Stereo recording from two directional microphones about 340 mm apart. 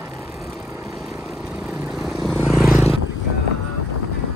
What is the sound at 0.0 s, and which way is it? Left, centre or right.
Vehicle, centre.